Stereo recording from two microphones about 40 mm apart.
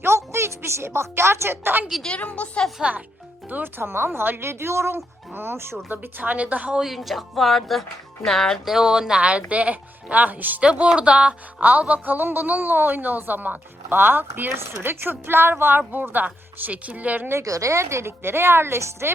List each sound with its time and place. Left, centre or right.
0.0 s a woman's voice: right
2.1 s a woman's voice: left
2.8 s speech: centre
3.6 s speech: right
5.9 s a woman's voice: right
6.3 s speech: right
6.8 s speech: centre
8.6 s speech: centre; by 10.6 s right
10.6 s a woman's voice: right
11.6 s a woman's voice: right
14.5 s a woman's voice: right
16.1 s speech: right
17.2 s a woman's voice: right